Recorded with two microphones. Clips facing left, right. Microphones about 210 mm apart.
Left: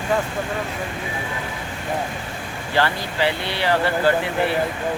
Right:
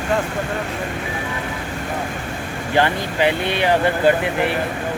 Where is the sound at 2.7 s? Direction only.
20° right (ahead or behind).